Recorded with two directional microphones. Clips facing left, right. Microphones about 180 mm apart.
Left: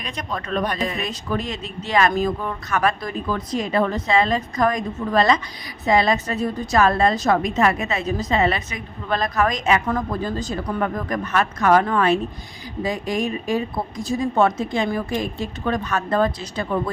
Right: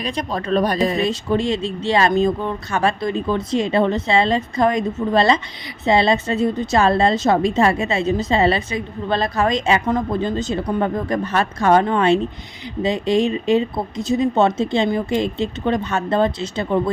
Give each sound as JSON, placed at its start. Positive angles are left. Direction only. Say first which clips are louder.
{"t": 0.0, "sound": "a woman's voice", "louder": "right 6 dB", "side_deg": -35}